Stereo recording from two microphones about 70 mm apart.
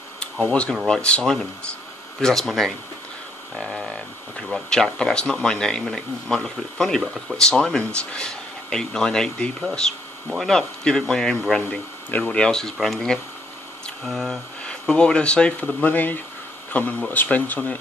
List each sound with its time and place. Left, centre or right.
0.8 s speech: centre
7.3 s speech: centre